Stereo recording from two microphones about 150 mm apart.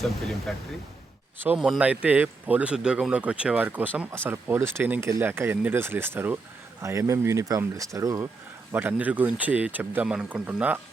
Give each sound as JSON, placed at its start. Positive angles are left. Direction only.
{"t": 0.0, "sound": "speech", "side_deg": 0}
{"t": 1.5, "sound": "speech", "side_deg": -5}
{"t": 8.7, "sound": "speech", "side_deg": -10}